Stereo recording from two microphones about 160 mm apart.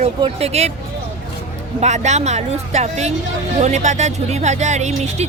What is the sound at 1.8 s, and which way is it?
A woman's voice, 45° right (ahead or behind).